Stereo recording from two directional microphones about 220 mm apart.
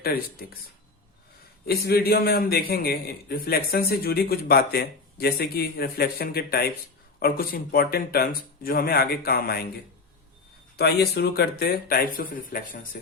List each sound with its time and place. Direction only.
0.0 s a man's voice: 40° left (ahead or behind)
1.6 s a man's voice: 45° left (ahead or behind)
10.8 s a man's voice: 50° left (ahead or behind)